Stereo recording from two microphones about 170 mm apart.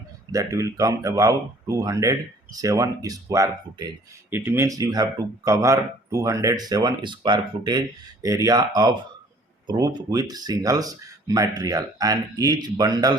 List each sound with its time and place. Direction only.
0.3 s speech: 20° right (ahead or behind)